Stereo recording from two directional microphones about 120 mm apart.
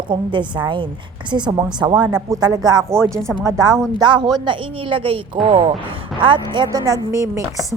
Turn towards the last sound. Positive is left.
turn(degrees=-25)  # may be behind; listen again after turning